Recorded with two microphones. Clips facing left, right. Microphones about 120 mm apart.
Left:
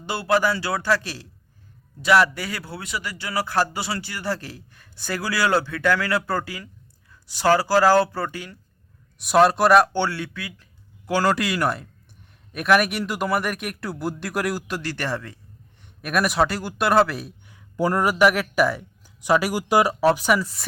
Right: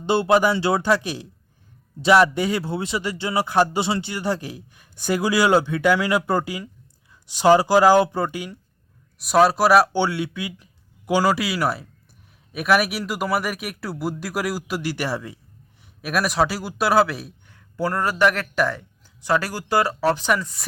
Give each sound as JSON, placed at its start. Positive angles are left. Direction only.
{"t": 0.0, "sound": "speech", "side_deg": -25}
{"t": 9.1, "sound": "a man's voice", "side_deg": 0}
{"t": 17.5, "sound": "speech", "side_deg": 15}